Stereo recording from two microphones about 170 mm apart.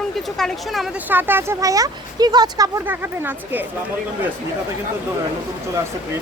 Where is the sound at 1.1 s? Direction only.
10° right (ahead or behind).